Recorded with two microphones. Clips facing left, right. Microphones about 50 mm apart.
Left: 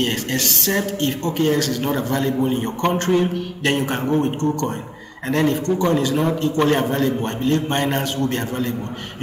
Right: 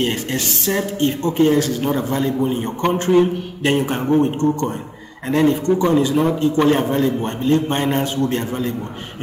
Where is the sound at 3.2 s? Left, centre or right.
Centre.